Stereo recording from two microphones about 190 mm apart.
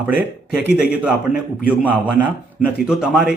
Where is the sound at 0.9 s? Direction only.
5° right (ahead or behind).